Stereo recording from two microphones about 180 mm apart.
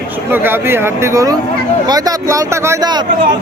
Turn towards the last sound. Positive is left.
turn(degrees=-20)  # may be behind; listen again after turning